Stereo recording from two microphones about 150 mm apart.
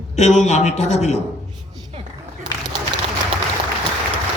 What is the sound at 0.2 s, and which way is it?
A man's voice, 50° left (ahead or behind).